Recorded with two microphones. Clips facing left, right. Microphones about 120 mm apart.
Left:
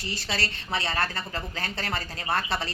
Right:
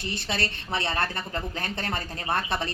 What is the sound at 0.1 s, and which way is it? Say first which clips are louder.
A woman's voice: right 1 dB; 20° right (ahead or behind).